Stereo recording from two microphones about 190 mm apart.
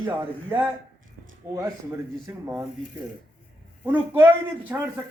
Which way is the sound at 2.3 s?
10° right (ahead or behind).